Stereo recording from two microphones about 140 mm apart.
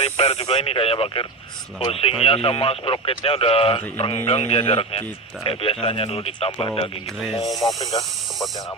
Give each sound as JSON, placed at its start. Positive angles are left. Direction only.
{"t": 0.0, "sound": "speech", "side_deg": 45}
{"t": 7.4, "sound": "speech", "side_deg": 0}